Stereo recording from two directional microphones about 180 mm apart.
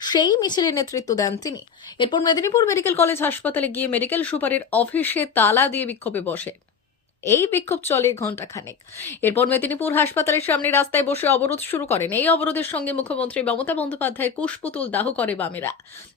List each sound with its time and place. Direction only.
0.0 s a woman's voice: 25° left (ahead or behind)